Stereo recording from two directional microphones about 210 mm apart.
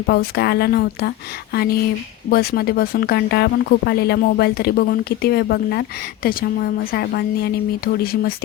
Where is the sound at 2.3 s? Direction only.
45° left (ahead or behind).